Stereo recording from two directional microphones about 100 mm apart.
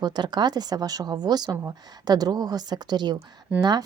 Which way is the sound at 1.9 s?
40° right (ahead or behind).